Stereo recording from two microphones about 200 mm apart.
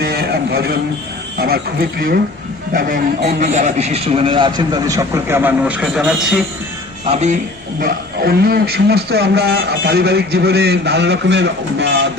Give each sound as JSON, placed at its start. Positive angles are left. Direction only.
{"t": 0.0, "sound": "a sound", "side_deg": -50}
{"t": 1.4, "sound": "a man's voice", "side_deg": -50}
{"t": 7.1, "sound": "speech", "side_deg": -35}
{"t": 7.8, "sound": "a man's voice", "side_deg": -50}